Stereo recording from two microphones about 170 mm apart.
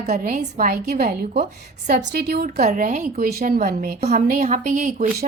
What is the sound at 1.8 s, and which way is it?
Speech, 70° right (ahead or behind).